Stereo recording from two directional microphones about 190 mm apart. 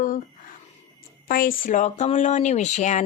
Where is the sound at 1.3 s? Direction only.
50° left (ahead or behind).